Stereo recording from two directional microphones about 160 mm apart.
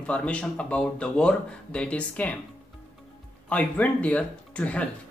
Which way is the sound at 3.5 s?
10° left (ahead or behind).